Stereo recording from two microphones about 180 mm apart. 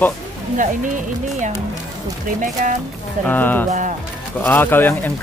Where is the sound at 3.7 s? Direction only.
45° right (ahead or behind).